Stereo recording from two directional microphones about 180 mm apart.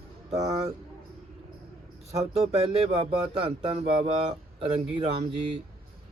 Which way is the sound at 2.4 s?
30° right (ahead or behind).